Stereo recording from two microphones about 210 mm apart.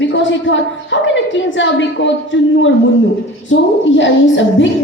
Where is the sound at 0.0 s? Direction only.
60° left (ahead or behind).